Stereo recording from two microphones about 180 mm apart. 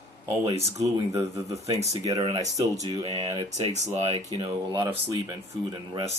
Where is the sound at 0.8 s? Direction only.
15° right (ahead or behind).